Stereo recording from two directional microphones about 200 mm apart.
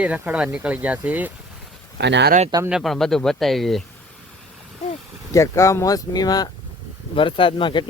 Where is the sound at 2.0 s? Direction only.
60° right (ahead or behind).